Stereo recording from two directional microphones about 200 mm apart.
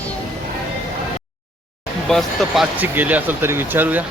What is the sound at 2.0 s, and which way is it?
Speech, centre (ahead or behind).